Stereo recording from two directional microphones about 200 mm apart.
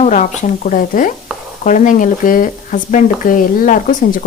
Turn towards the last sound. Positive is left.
turn(degrees=40)  # may be behind; listen again after turning